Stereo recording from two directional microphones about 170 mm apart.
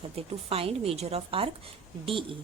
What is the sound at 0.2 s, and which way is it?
A woman's voice, 35° right (ahead or behind).